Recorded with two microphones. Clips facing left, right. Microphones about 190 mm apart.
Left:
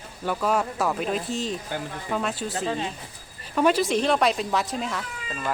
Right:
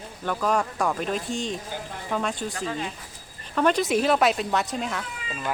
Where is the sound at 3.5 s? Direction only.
5° left (ahead or behind).